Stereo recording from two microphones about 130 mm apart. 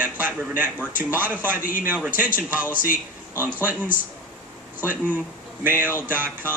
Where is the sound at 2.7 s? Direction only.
90° left.